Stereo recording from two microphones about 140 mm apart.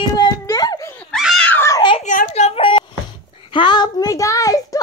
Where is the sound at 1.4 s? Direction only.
10° left (ahead or behind).